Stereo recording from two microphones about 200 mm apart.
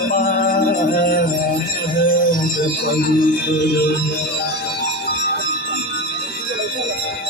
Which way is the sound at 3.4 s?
60° left (ahead or behind).